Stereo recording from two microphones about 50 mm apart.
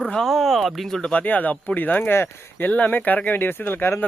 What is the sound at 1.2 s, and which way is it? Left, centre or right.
Speech, left.